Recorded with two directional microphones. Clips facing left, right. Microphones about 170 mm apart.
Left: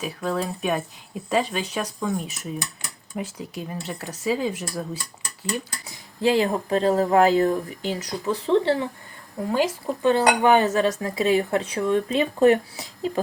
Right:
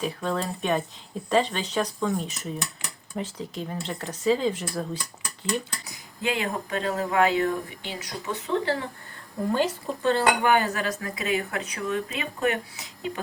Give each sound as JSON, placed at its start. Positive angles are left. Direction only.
{"t": 0.0, "sound": "speech", "side_deg": 5}
{"t": 6.2, "sound": "speech", "side_deg": 30}
{"t": 9.5, "sound": "speech", "side_deg": 10}
{"t": 10.0, "sound": "cutlery", "side_deg": 15}